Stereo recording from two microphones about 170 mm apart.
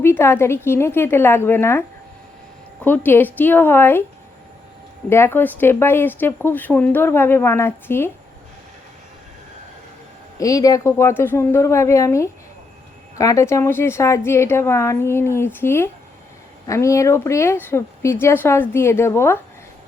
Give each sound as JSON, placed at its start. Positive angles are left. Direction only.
{"t": 0.0, "sound": "speech", "side_deg": 15}
{"t": 2.8, "sound": "speech", "side_deg": 10}
{"t": 5.0, "sound": "speech", "side_deg": 15}
{"t": 10.3, "sound": "speech", "side_deg": 20}